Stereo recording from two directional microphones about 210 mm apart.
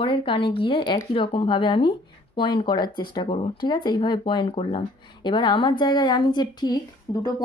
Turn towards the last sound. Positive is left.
turn(degrees=20)  # may be behind; listen again after turning